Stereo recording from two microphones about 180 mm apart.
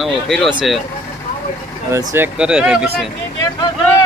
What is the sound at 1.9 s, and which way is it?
Speech, 15° right (ahead or behind).